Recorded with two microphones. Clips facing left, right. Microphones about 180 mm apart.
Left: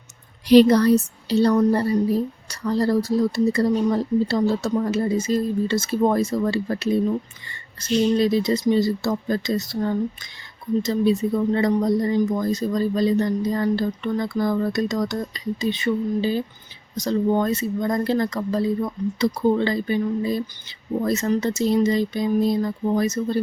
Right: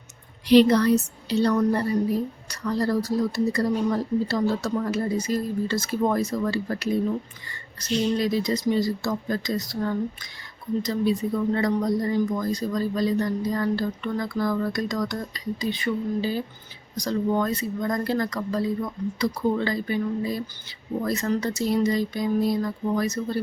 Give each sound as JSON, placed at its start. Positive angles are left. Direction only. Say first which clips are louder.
{"t": 0.4, "sound": "a woman's voice", "louder": "left 3 dB", "side_deg": 40}